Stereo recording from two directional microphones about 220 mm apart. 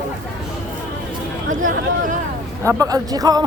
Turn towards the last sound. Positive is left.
turn(degrees=-15)  # may be behind; listen again after turning